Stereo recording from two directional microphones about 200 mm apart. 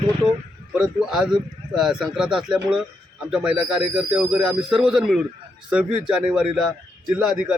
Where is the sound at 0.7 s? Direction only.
Centre (ahead or behind).